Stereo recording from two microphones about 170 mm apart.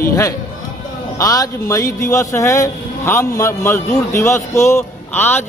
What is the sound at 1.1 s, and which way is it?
A man's voice, 20° left (ahead or behind).